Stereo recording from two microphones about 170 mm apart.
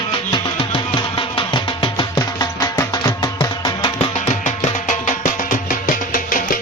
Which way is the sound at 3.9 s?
40° left (ahead or behind).